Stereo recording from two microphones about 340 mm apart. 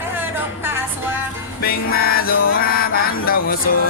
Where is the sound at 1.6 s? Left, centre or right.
Left.